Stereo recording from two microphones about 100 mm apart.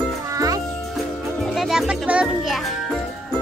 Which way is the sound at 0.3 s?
35° right (ahead or behind).